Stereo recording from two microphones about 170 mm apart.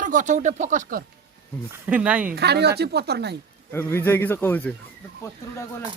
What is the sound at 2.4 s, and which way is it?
Speech, 75° right (ahead or behind).